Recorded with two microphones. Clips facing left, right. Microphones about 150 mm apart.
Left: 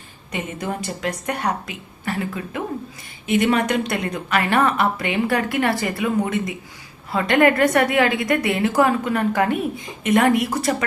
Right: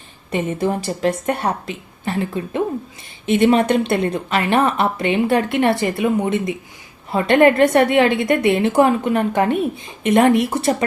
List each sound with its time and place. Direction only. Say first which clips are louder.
0.6 s a woman's voice: right 6 dB; 25° right (ahead or behind)